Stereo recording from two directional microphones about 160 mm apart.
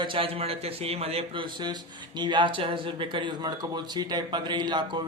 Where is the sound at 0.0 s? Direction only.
35° right (ahead or behind).